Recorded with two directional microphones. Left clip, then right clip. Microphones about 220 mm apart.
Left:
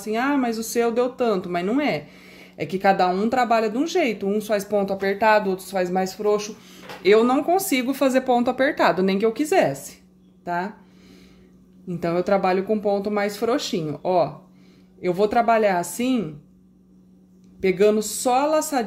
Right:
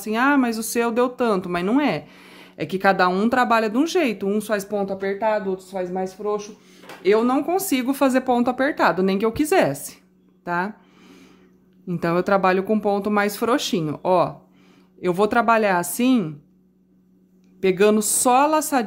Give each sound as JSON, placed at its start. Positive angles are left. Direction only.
{"t": 0.0, "sound": "speech", "side_deg": -15}
{"t": 7.0, "sound": "speech", "side_deg": -10}
{"t": 10.4, "sound": "a sound", "side_deg": -20}
{"t": 11.9, "sound": "speech", "side_deg": -20}
{"t": 17.6, "sound": "speech", "side_deg": -20}